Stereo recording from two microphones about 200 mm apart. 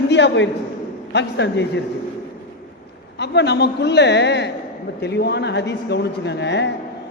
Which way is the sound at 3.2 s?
60° left (ahead or behind).